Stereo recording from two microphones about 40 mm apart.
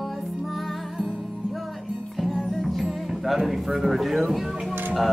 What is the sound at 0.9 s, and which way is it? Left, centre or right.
Music, centre.